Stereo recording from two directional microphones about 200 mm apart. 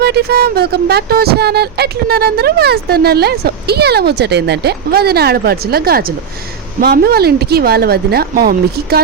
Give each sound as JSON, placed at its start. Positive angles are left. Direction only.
{"t": 0.0, "sound": "speech", "side_deg": -55}